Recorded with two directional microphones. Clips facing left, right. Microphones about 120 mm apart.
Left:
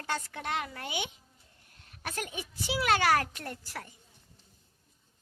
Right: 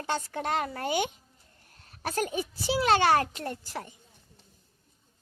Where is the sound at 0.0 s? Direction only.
25° right (ahead or behind).